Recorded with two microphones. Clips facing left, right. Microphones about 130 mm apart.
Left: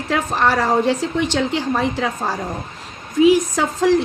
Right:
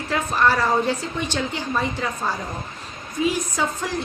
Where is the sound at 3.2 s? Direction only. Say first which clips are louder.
Left 9 dB; 80° left.